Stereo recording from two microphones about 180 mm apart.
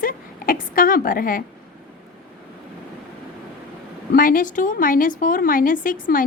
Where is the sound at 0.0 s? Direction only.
50° left (ahead or behind).